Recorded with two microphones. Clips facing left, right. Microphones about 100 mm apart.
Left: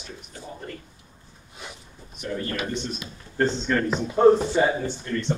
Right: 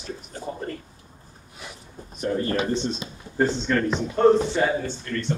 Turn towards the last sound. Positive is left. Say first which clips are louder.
# left 1 dB
turn(degrees=20)  # may be behind; listen again after turning